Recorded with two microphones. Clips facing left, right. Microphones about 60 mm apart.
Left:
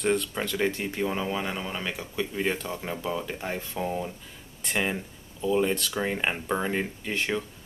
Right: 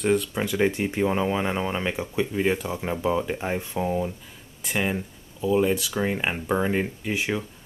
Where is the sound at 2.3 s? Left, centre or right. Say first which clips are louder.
Right 4 dB; centre.